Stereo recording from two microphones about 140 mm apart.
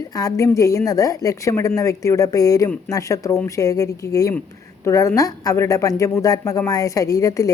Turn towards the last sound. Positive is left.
turn(degrees=25)  # may be behind; listen again after turning